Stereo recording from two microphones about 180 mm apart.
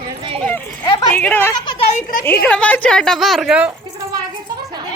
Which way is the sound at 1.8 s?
45° left (ahead or behind).